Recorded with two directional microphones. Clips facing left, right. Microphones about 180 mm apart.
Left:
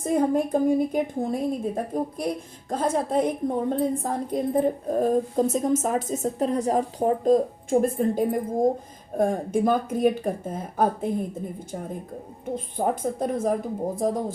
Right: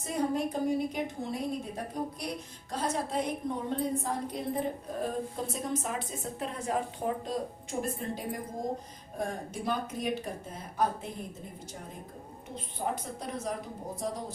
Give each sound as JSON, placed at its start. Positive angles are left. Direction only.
{"t": 0.0, "sound": "a woman's voice", "side_deg": 50}
{"t": 12.7, "sound": "a woman's voice", "side_deg": 50}